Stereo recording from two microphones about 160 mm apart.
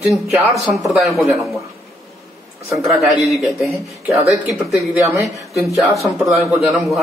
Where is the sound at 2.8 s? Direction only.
Centre (ahead or behind).